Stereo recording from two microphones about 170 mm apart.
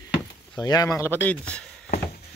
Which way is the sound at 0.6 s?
25° left (ahead or behind).